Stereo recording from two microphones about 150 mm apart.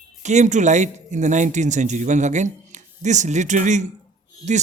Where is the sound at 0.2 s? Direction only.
50° right (ahead or behind).